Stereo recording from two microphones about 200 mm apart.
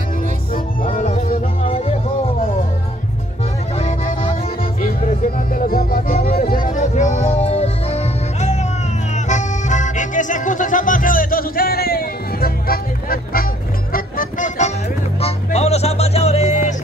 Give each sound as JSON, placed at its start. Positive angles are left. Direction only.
{"t": 0.9, "sound": "music", "side_deg": 40}
{"t": 3.7, "sound": "music", "side_deg": 30}
{"t": 4.8, "sound": "music", "side_deg": 45}
{"t": 15.1, "sound": "music", "side_deg": 30}